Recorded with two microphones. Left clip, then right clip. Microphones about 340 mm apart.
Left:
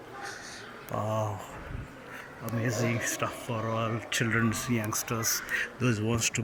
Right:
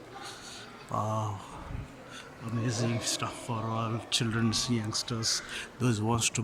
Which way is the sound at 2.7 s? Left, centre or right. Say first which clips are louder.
Left 2 dB; centre.